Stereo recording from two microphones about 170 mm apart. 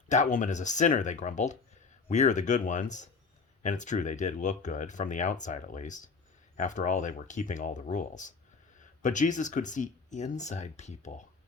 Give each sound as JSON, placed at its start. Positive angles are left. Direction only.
{"t": 0.1, "sound": "speech", "side_deg": 45}